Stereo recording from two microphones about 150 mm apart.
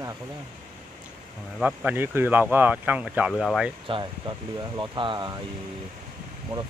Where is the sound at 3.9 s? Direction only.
30° right (ahead or behind).